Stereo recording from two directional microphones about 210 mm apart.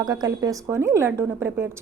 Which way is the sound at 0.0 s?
20° right (ahead or behind).